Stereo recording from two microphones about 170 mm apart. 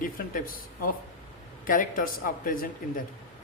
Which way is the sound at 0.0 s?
55° left (ahead or behind).